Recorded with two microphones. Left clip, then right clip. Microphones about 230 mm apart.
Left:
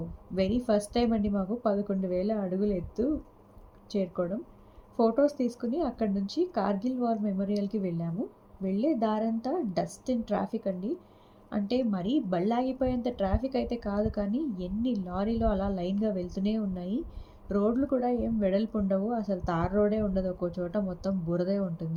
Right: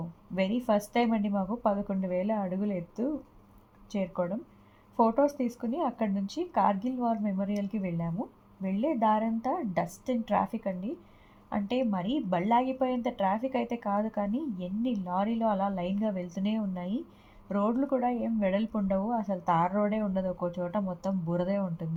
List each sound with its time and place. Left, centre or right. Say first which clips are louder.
0.3 s a woman's voice: left 1 dB; right
3.9 s a woman's voice: left 1 dB; right